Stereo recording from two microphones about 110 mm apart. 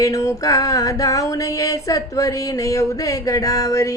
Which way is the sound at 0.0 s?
30° left (ahead or behind).